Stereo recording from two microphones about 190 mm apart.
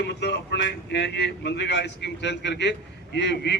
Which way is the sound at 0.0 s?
65° left (ahead or behind).